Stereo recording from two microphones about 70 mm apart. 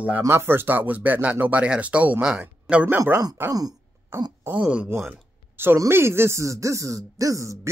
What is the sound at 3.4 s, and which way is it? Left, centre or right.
Speech, right.